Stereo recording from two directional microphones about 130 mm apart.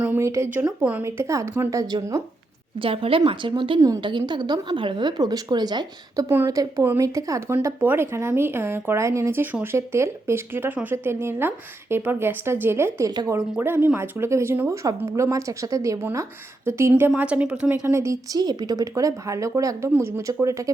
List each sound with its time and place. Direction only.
0.0 s a woman's voice: 15° right (ahead or behind)
1.2 s speech: 25° right (ahead or behind)
2.8 s speech: 45° right (ahead or behind)
3.8 s speech: 25° right (ahead or behind)
4.0 s speech: 35° right (ahead or behind)
6.2 s a woman's voice: 20° right (ahead or behind)
13.1 s speech: 30° right (ahead or behind)
13.3 s a woman's voice: 15° right (ahead or behind)
17.8 s speech: 20° right (ahead or behind)